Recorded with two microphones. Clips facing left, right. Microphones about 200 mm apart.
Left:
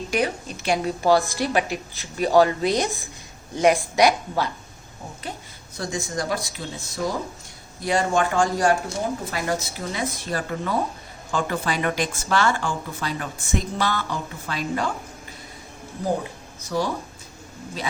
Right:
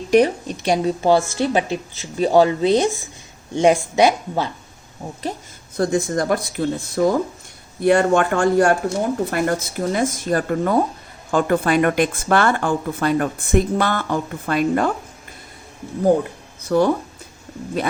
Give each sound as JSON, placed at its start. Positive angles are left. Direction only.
{"t": 0.6, "sound": "a woman's voice", "side_deg": -35}
{"t": 1.0, "sound": "speech", "side_deg": -25}
{"t": 5.7, "sound": "speech", "side_deg": -55}
{"t": 16.6, "sound": "speech", "side_deg": -60}